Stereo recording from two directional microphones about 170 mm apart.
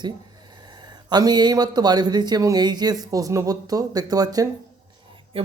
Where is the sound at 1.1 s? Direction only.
25° right (ahead or behind).